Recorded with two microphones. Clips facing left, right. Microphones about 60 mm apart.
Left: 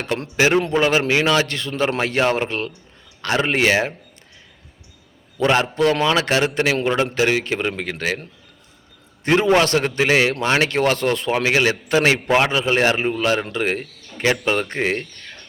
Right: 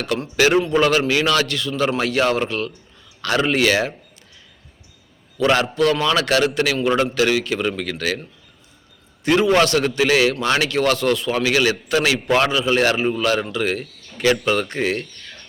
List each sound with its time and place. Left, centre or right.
0.3 s a man's voice: left
1.5 s speech: left
2.0 s a man's voice: left
5.4 s a man's voice: left
9.3 s a man's voice: left
13.5 s speech: left